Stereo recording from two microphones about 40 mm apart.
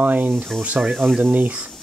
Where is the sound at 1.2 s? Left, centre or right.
Right.